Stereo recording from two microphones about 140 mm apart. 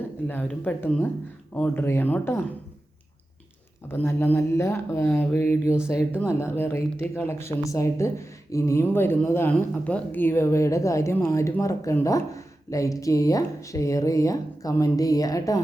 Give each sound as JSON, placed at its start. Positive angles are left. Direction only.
{"t": 0.3, "sound": "speech", "side_deg": 10}
{"t": 3.8, "sound": "speech", "side_deg": 15}